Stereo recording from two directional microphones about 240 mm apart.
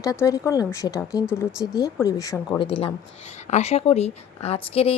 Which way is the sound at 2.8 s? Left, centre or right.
Left.